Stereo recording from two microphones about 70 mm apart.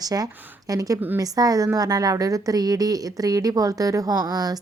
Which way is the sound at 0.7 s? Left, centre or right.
Right.